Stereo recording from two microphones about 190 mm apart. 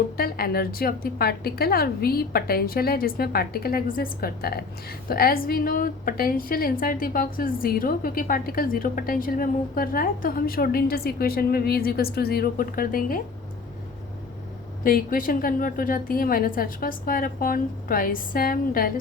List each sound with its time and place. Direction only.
0.2 s a woman's voice: 55° left (ahead or behind)
14.8 s a woman's voice: 50° left (ahead or behind)